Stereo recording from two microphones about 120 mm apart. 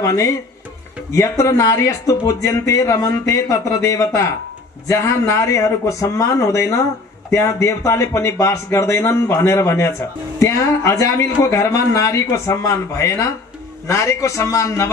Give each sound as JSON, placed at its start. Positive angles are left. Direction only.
{"t": 0.0, "sound": "speech", "side_deg": 25}